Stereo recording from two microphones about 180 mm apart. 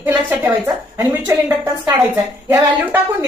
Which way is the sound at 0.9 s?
15° right (ahead or behind).